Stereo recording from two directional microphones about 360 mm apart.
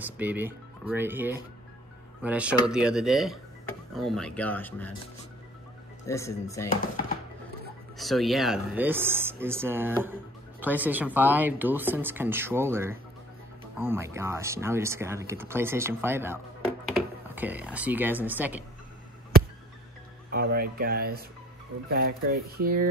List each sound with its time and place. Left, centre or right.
0.0 s speech: centre
6.0 s speech: centre
8.0 s speech: centre
17.4 s speech: centre
20.2 s speech: right